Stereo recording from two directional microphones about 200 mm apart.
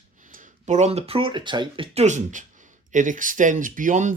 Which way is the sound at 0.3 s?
40° right (ahead or behind).